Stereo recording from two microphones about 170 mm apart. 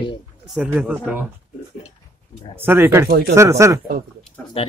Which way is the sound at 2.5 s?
15° right (ahead or behind).